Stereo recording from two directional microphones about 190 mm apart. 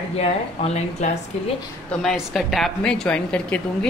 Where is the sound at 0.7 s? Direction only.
35° left (ahead or behind).